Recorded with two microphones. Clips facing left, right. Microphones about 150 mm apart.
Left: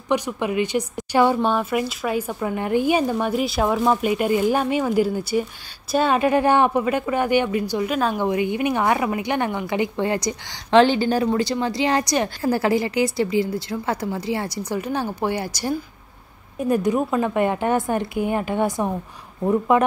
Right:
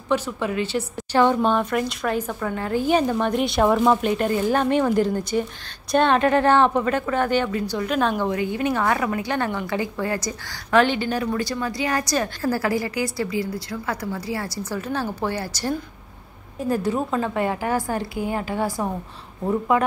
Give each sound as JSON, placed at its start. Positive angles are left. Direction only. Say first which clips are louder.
{"t": 0.1, "sound": "speech", "louder": "left 1 dB", "side_deg": 15}
{"t": 8.2, "sound": "a woman's voice", "louder": "left 2 dB", "side_deg": 15}